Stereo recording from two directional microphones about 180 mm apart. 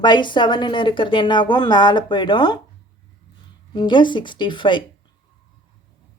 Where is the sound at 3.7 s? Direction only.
25° left (ahead or behind).